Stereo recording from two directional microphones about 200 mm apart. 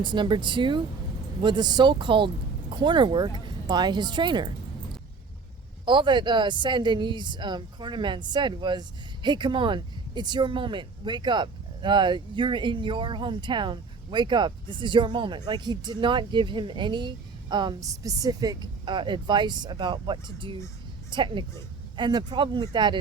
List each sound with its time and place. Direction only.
0.0 s a woman's voice: 25° right (ahead or behind)
5.8 s a woman's voice: 25° right (ahead or behind)